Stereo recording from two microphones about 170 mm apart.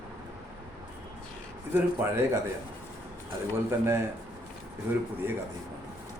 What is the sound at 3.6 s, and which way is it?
Speech, 15° right (ahead or behind).